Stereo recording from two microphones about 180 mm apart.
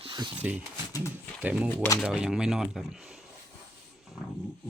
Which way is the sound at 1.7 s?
10° left (ahead or behind).